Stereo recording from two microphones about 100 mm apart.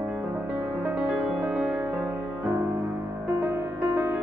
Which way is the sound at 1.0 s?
5° right (ahead or behind).